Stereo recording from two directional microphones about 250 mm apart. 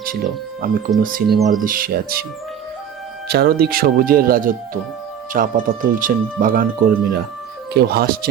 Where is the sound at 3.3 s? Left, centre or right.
Right.